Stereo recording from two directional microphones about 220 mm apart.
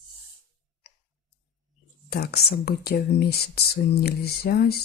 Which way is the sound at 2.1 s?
45° left (ahead or behind).